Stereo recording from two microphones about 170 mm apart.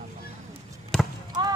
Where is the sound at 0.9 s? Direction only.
5° left (ahead or behind).